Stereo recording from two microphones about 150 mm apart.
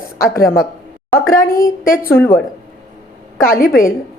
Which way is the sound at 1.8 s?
70° left (ahead or behind).